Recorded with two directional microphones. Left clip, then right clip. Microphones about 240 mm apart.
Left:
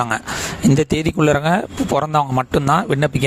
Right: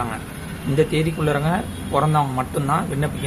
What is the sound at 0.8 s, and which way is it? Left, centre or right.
Speech, left.